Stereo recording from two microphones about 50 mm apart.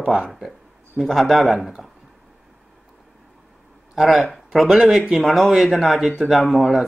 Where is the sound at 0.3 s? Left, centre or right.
Centre.